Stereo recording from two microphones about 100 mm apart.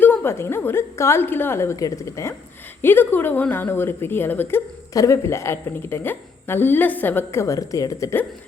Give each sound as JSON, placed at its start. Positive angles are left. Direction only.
{"t": 0.0, "sound": "a woman's voice", "side_deg": 20}
{"t": 2.8, "sound": "a woman's voice", "side_deg": 20}
{"t": 4.9, "sound": "a woman's voice", "side_deg": 30}